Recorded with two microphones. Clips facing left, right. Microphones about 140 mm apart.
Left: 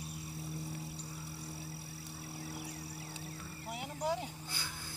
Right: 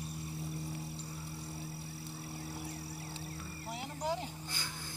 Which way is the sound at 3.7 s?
10° left (ahead or behind).